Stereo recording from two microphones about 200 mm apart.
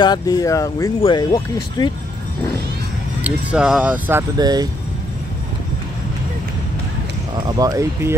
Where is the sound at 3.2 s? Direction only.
5° right (ahead or behind).